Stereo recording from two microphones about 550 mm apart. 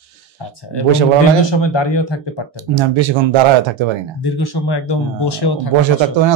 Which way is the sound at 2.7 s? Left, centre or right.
Right.